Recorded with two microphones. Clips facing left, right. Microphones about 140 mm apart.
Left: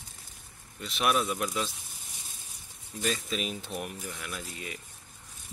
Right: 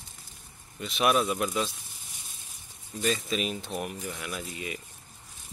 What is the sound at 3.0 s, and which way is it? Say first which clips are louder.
Speech: right 3 dB; centre (ahead or behind).